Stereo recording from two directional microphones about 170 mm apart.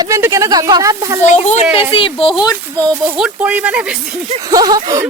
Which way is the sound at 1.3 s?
40° left (ahead or behind).